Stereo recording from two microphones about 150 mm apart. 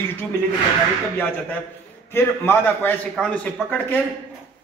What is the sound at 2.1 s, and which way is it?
A man's voice, 15° left (ahead or behind).